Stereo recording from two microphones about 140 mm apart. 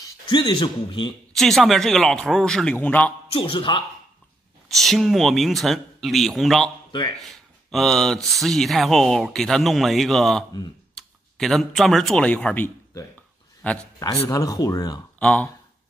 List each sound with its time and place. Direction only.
0.3 s a man's voice: 30° left (ahead or behind)
1.3 s speech: centre (ahead or behind)
3.3 s a man's voice: 40° left (ahead or behind)
4.6 s a man's voice: centre (ahead or behind)
14.3 s speech: 25° left (ahead or behind)
15.1 s speech: 10° left (ahead or behind)